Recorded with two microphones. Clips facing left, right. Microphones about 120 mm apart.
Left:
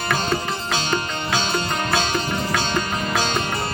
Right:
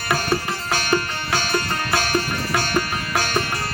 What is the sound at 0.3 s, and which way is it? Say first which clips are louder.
Music: right 1 dB; 20° left (ahead or behind).